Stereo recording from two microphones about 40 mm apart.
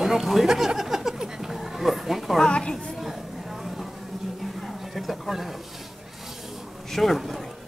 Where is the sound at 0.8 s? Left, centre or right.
Centre.